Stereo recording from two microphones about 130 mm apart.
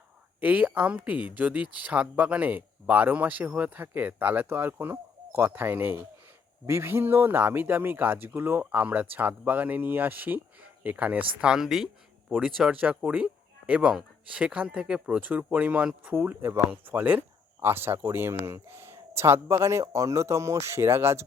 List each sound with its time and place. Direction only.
0.3 s speech: 10° right (ahead or behind)